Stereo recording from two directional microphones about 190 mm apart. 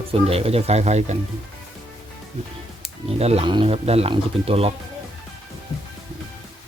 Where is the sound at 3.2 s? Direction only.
30° right (ahead or behind).